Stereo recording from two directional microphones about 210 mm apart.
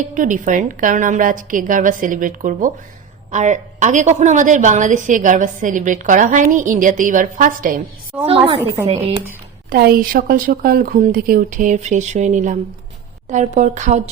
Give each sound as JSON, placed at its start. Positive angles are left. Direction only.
{"t": 0.1, "sound": "a woman's voice", "side_deg": -40}
{"t": 8.3, "sound": "speech", "side_deg": -25}
{"t": 9.6, "sound": "a woman's voice", "side_deg": -45}